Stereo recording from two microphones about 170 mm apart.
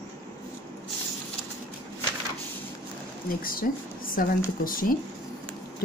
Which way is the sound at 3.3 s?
55° left (ahead or behind).